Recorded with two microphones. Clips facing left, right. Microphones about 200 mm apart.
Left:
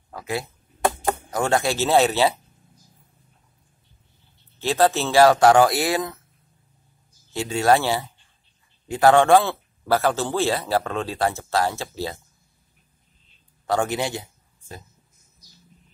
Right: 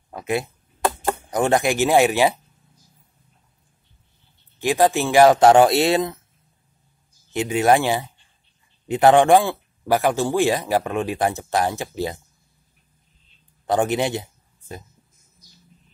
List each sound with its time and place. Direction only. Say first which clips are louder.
0.1 s speech: right 4 dB; 20° right (ahead or behind)
4.6 s speech: right 2 dB; 15° right (ahead or behind)
7.3 s speech: right 2 dB; 15° right (ahead or behind)
13.7 s speech: right 3 dB; 20° right (ahead or behind)